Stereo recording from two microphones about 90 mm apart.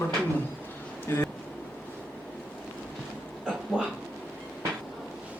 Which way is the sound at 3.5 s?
10° right (ahead or behind).